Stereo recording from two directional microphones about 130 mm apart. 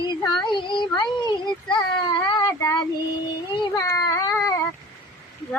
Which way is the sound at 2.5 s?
20° left (ahead or behind).